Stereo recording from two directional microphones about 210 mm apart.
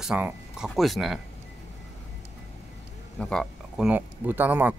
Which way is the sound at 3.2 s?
5° left (ahead or behind).